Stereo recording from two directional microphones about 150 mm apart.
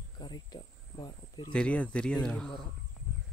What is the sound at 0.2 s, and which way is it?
Speech, 30° left (ahead or behind).